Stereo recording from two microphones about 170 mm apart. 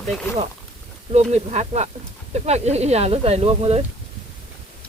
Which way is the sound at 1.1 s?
40° right (ahead or behind).